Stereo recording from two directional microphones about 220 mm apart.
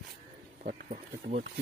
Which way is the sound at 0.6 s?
35° right (ahead or behind).